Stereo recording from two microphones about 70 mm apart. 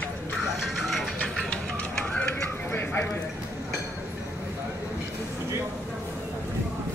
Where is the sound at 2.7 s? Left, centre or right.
Left.